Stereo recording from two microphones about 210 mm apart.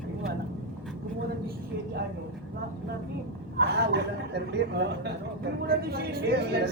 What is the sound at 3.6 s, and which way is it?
Speech, 50° right (ahead or behind).